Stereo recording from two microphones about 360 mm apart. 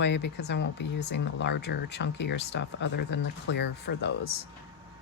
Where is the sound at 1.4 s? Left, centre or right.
Left.